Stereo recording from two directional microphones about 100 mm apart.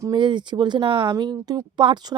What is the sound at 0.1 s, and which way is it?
Speech, 50° right (ahead or behind).